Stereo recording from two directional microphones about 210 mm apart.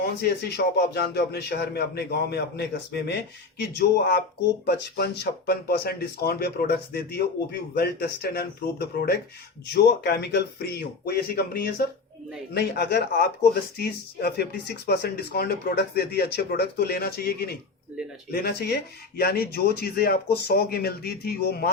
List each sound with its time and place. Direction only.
0.0 s speech: 50° left (ahead or behind)